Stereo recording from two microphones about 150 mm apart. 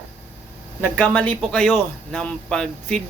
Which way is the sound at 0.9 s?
10° left (ahead or behind).